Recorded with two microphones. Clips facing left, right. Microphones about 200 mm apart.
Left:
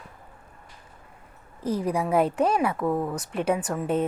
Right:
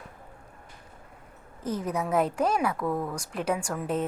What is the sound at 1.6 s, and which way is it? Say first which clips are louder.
Speech: left 4 dB; 30° left (ahead or behind).